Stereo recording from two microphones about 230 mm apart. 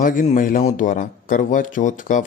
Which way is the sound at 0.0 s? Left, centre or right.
Left.